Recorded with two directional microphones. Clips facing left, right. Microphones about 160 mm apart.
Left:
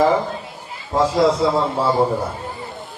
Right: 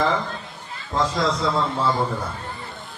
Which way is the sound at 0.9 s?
10° left (ahead or behind).